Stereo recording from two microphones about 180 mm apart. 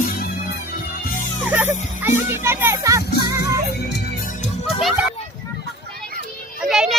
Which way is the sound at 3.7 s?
60° left (ahead or behind).